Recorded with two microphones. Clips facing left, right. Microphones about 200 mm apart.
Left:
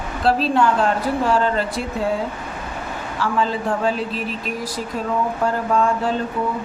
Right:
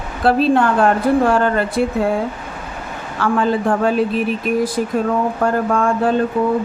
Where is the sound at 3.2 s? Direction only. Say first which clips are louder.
Right 5 dB; 55° right (ahead or behind).